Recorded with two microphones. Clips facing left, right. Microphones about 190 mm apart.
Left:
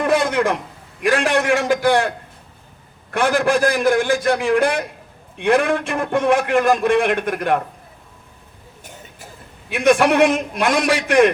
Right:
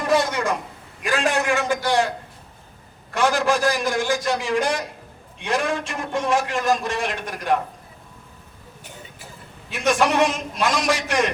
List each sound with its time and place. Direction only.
0.0 s a sound: 55° left (ahead or behind)
1.6 s a man's voice: 55° left (ahead or behind)
9.7 s a man's voice: 55° left (ahead or behind)